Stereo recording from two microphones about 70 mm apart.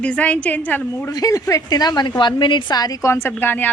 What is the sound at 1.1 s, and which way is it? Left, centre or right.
Speech, left.